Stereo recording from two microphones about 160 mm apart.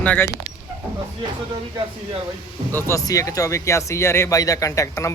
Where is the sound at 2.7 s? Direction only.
15° left (ahead or behind).